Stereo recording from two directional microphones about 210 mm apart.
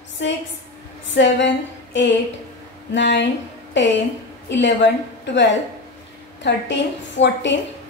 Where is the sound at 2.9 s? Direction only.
60° left (ahead or behind).